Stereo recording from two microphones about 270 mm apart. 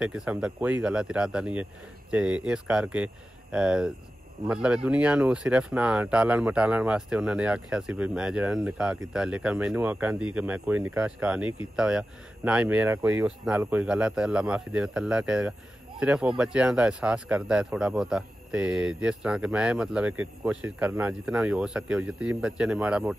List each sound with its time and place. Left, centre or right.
0.0 s speech: centre